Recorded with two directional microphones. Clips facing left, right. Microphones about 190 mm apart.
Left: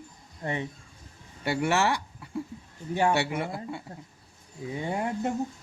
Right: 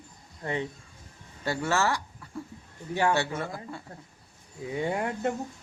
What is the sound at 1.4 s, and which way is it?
Speech, 20° left (ahead or behind).